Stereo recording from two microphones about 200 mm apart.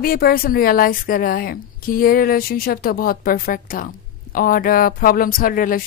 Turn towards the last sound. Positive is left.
turn(degrees=45)  # may be behind; listen again after turning